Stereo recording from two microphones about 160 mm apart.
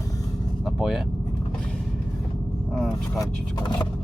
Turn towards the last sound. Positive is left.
turn(degrees=30)  # may be behind; listen again after turning